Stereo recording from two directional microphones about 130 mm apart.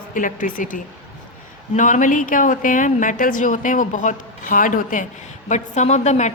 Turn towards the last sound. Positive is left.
turn(degrees=65)  # may be behind; listen again after turning